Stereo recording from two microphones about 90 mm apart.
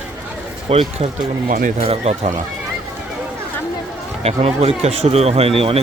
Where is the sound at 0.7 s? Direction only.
90° right.